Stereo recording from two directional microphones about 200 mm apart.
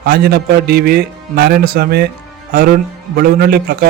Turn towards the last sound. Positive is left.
turn(degrees=-50)  # may be behind; listen again after turning